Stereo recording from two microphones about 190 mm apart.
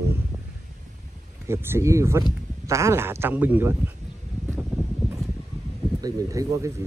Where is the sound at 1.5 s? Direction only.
15° right (ahead or behind).